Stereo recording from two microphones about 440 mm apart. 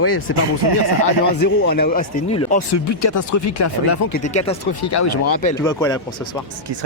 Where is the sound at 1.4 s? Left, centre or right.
Left.